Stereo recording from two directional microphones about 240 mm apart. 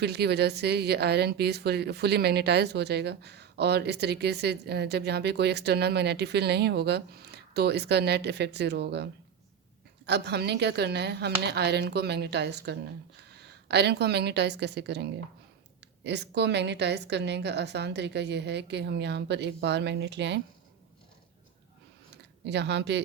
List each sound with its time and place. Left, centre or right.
0.0 s a woman's voice: right
10.1 s a woman's voice: right
22.1 s a sound: right